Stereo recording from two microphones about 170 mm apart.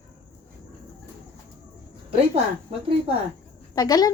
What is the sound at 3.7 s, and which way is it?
Speech, 20° left (ahead or behind).